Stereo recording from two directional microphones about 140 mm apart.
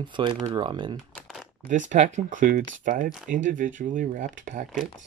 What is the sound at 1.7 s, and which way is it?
Speech, 60° right (ahead or behind).